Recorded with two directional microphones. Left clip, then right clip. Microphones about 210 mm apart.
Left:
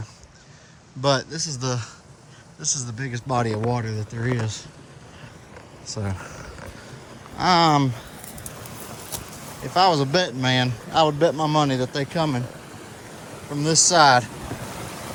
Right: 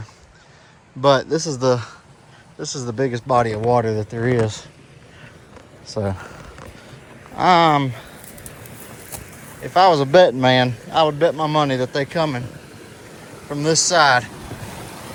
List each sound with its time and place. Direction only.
1.0 s a man's voice: 10° left (ahead or behind)
1.3 s speech: 5° right (ahead or behind); by 3.6 s 10° left (ahead or behind)
3.6 s speech: centre (ahead or behind)
5.8 s speech: centre (ahead or behind)
7.3 s a man's voice: 5° left (ahead or behind)
9.7 s a man's voice: 10° left (ahead or behind)
13.5 s speech: 15° left (ahead or behind)
14.4 s vehicle: centre (ahead or behind)